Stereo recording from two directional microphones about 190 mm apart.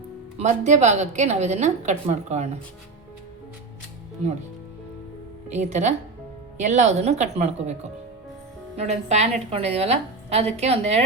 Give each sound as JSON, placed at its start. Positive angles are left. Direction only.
{"t": 0.3, "sound": "a woman's voice", "side_deg": -35}
{"t": 5.5, "sound": "a woman's voice", "side_deg": -35}